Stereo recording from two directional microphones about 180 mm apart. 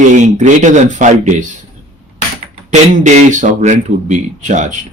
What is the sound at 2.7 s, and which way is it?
Speech, 45° right (ahead or behind).